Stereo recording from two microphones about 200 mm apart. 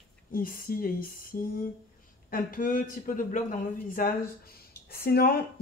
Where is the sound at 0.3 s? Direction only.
45° left (ahead or behind).